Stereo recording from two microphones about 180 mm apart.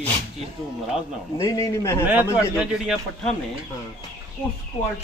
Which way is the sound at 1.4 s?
15° left (ahead or behind).